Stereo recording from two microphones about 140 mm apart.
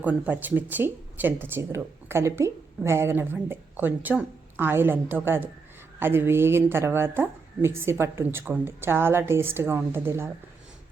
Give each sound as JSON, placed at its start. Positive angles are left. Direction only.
{"t": 0.0, "sound": "a woman's voice", "side_deg": -10}